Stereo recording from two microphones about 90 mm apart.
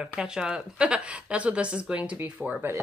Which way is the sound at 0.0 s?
10° right (ahead or behind).